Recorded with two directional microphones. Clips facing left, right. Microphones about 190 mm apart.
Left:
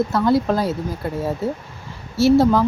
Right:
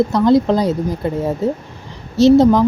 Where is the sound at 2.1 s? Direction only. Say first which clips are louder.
Right 5 dB; 20° right (ahead or behind).